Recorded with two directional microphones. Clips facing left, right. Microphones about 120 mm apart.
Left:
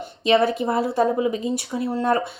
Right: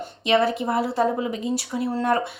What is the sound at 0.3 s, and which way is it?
A woman's voice, 25° left (ahead or behind).